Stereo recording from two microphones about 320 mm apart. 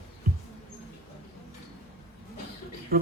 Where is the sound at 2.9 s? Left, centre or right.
Right.